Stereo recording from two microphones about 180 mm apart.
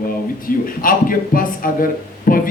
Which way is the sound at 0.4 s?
50° left (ahead or behind).